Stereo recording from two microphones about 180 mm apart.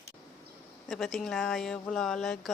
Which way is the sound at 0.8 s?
Centre (ahead or behind).